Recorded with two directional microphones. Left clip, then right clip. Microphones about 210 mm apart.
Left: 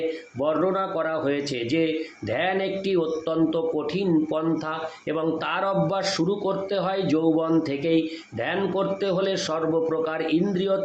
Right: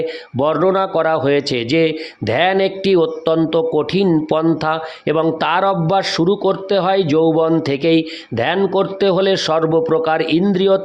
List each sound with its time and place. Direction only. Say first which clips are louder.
0.3 s a man's voice: right 9 dB; 50° right (ahead or behind)